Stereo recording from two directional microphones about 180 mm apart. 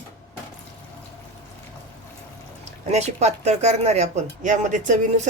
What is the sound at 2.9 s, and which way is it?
Speech, 40° right (ahead or behind).